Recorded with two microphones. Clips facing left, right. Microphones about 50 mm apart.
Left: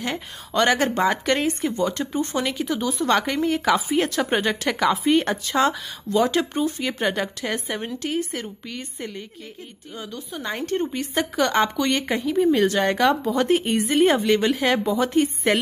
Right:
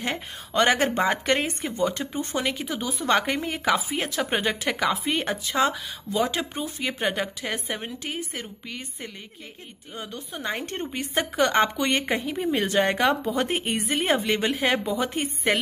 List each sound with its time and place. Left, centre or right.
0.6 s speech: right
3.7 s speech: centre
9.9 s a woman's voice: right; by 14.9 s centre